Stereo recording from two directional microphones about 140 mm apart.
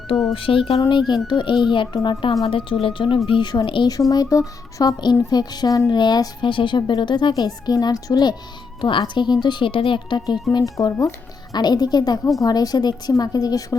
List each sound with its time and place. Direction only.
0.3 s speech: 40° left (ahead or behind)